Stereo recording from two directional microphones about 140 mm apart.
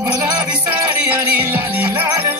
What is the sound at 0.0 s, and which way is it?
Music, 25° right (ahead or behind).